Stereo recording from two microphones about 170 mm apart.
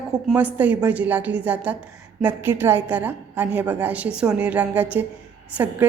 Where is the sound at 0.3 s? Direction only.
10° right (ahead or behind).